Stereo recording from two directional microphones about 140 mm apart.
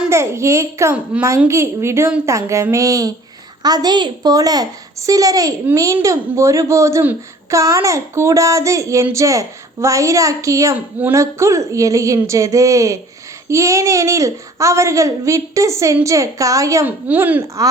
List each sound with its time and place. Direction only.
0.1 s a child's voice: 20° right (ahead or behind)
17.1 s speech: 10° right (ahead or behind)